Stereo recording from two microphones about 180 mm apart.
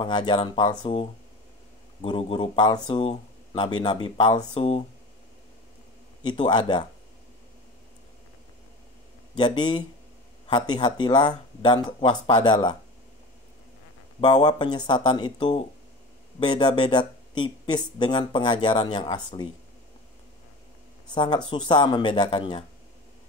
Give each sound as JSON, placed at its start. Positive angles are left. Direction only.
{"t": 0.0, "sound": "speech", "side_deg": 25}
{"t": 2.0, "sound": "speech", "side_deg": 25}
{"t": 6.2, "sound": "speech", "side_deg": 25}
{"t": 9.4, "sound": "speech", "side_deg": 25}
{"t": 14.2, "sound": "speech", "side_deg": 25}
{"t": 21.1, "sound": "speech", "side_deg": 25}